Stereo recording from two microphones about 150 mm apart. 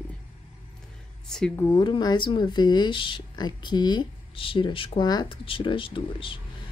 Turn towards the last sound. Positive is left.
turn(degrees=35)  # may be behind; listen again after turning